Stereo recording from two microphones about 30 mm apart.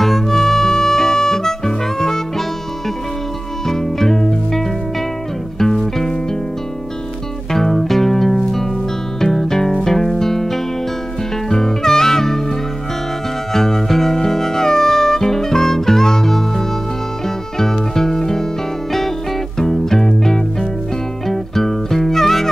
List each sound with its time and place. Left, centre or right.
0.0 s music: centre
2.0 s harmonica: centre
3.6 s music: centre
7.5 s music: centre
13.5 s music: centre
19.6 s music: centre